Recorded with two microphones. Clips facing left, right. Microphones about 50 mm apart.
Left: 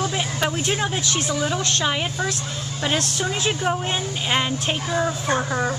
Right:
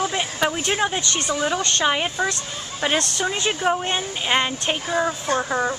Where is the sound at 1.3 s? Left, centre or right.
Centre.